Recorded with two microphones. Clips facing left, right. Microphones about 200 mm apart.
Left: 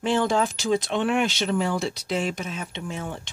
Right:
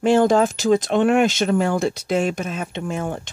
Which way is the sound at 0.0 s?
45° right (ahead or behind).